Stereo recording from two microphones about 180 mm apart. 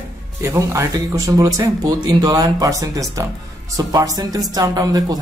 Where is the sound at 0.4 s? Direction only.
15° right (ahead or behind).